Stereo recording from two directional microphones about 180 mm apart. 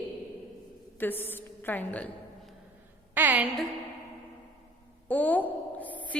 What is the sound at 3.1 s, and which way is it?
Speech, 10° right (ahead or behind).